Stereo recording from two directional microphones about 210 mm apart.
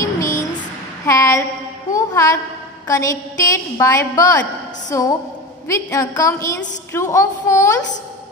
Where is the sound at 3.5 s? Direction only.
15° left (ahead or behind).